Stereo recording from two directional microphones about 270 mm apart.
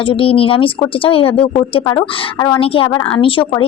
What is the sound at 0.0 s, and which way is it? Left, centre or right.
A woman's voice, centre.